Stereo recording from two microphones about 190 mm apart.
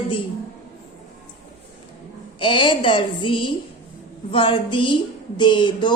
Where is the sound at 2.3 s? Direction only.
25° left (ahead or behind).